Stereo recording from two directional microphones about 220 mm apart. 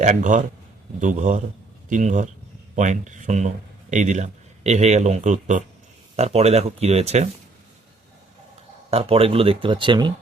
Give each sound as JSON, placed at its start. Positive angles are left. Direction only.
{"t": 0.0, "sound": "speech", "side_deg": -35}
{"t": 8.9, "sound": "speech", "side_deg": -25}